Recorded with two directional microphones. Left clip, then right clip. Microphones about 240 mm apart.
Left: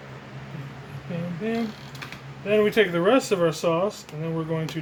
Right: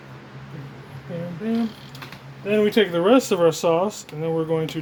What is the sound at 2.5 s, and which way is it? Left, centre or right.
Speech, right.